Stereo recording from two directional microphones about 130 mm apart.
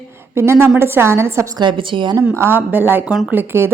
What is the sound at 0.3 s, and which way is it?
A woman's voice, 20° right (ahead or behind).